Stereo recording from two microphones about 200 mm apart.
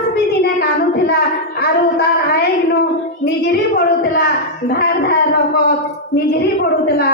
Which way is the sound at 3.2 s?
55° left (ahead or behind).